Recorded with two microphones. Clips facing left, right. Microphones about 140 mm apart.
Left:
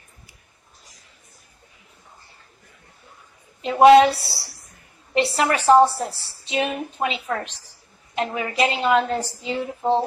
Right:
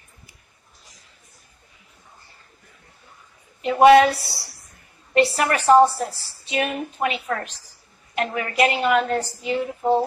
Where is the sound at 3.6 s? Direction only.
20° left (ahead or behind).